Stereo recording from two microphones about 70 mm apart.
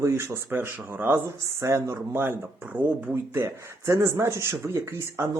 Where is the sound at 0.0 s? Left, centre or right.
Right.